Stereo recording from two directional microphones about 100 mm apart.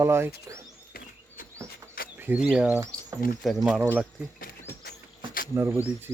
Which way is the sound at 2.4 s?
10° right (ahead or behind).